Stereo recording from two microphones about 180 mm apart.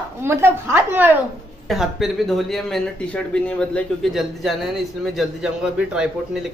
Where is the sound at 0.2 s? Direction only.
15° right (ahead or behind).